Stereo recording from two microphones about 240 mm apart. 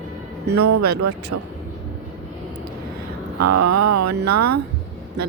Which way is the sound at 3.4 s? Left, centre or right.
Right.